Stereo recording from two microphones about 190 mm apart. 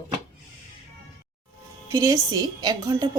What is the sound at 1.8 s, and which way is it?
A woman's voice, 15° right (ahead or behind).